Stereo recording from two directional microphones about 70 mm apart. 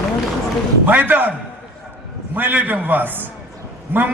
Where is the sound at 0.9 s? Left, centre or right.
Right.